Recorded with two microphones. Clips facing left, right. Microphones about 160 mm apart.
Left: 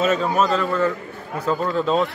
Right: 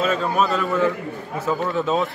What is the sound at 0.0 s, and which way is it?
A man's voice, 5° left (ahead or behind).